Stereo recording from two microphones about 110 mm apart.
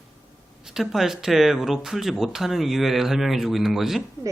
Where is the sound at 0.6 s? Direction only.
5° right (ahead or behind).